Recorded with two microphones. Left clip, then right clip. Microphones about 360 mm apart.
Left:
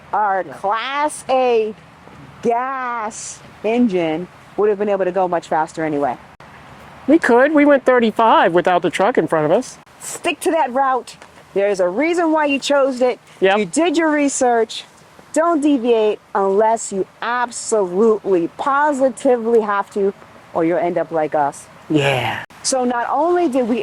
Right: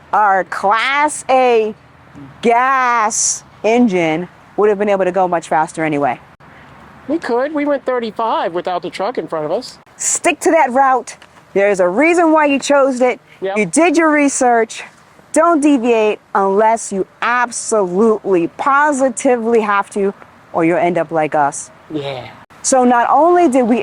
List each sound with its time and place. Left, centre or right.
0.1 s speech: right
7.1 s speech: left
10.2 s speech: right
21.9 s speech: left
22.7 s speech: right